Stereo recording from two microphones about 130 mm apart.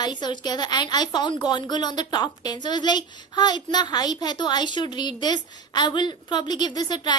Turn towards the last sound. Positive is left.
turn(degrees=35)  # may be behind; listen again after turning